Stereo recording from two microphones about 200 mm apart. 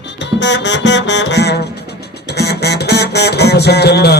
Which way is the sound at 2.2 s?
55° left (ahead or behind).